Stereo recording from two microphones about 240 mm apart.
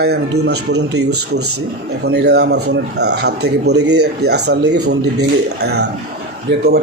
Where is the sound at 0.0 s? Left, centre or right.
Right.